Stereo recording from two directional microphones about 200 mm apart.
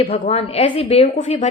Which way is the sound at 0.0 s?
30° left (ahead or behind).